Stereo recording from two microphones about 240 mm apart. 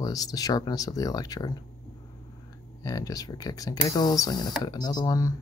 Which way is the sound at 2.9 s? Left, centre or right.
Centre.